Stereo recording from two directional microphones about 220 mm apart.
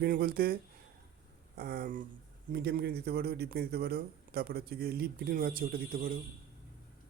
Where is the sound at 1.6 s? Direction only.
40° right (ahead or behind).